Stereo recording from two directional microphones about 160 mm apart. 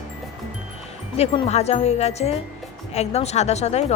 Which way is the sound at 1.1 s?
40° left (ahead or behind).